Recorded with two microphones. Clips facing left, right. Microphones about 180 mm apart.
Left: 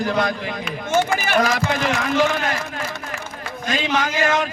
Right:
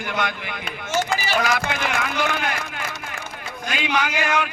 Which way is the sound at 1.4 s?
40° left (ahead or behind).